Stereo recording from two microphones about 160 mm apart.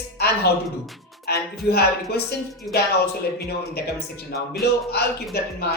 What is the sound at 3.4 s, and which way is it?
A man's voice, 90° left.